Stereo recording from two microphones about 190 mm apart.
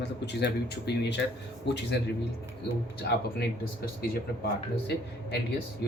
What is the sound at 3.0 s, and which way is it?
A man's voice, 55° left (ahead or behind).